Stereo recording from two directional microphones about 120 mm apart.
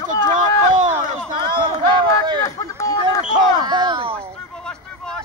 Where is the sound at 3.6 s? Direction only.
35° right (ahead or behind).